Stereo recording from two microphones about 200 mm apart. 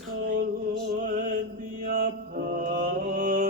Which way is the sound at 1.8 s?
45° right (ahead or behind).